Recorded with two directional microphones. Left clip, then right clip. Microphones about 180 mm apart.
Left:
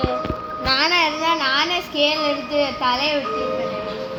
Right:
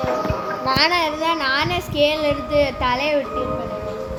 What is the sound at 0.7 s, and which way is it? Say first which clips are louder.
A woman's voice: left 1 dB; 5° left (ahead or behind).